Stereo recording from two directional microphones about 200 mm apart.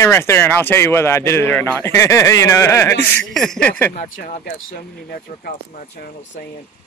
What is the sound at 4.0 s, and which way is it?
Speech, 40° left (ahead or behind).